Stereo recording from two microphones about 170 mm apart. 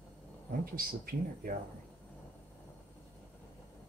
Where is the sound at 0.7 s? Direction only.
60° right (ahead or behind).